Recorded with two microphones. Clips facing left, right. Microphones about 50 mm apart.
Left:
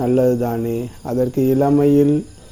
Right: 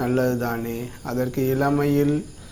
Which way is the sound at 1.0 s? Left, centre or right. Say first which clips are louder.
Left 6 dB; right.